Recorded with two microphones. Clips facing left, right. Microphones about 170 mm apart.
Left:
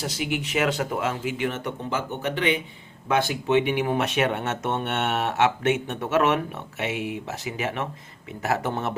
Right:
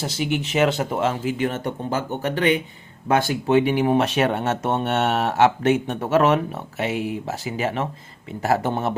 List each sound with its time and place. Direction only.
0.0 s speech: 30° right (ahead or behind)